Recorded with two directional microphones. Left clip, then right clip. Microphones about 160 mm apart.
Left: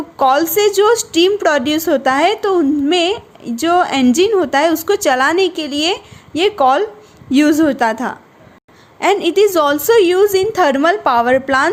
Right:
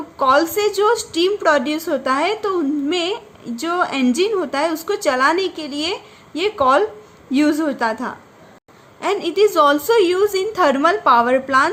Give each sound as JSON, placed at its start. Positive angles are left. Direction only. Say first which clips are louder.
{"t": 0.2, "sound": "a woman's voice", "louder": "left 3 dB", "side_deg": 45}